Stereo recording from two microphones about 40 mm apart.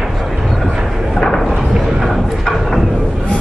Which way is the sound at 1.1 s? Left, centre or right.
Centre.